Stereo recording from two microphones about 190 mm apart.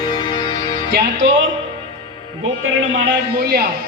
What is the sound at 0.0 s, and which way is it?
Music, 25° left (ahead or behind).